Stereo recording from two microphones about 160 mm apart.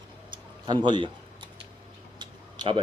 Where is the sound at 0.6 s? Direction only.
30° right (ahead or behind).